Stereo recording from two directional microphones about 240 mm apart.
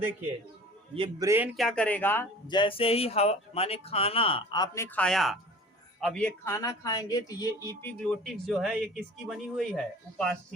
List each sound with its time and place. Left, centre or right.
0.9 s a man's voice: right
1.3 s speech: centre